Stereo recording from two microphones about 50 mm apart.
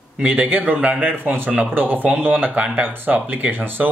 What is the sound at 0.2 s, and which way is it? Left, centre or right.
Speech, right.